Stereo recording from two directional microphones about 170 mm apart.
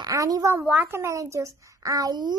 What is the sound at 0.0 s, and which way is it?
A woman's voice, 20° right (ahead or behind).